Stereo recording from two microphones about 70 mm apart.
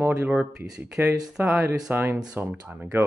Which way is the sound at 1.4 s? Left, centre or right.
Right.